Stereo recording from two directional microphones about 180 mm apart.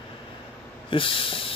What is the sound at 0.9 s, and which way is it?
Speech, 30° left (ahead or behind).